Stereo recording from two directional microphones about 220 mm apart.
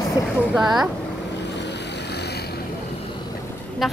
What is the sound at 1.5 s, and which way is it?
Vehicle, 50° left (ahead or behind).